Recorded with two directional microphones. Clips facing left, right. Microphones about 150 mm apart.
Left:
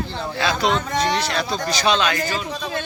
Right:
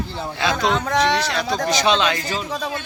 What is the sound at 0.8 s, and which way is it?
Speech, 90° right.